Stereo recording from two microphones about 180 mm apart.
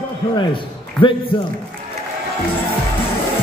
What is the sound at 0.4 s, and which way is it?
A man's voice, 30° left (ahead or behind).